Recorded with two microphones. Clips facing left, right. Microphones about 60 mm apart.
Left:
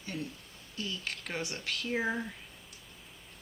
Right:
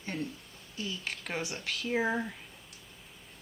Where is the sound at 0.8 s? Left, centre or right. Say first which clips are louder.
Right 1 dB; centre.